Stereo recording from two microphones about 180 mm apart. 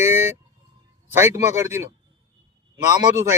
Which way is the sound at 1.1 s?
15° right (ahead or behind).